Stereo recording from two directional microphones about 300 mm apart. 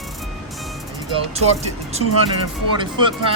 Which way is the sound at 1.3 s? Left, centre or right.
Right.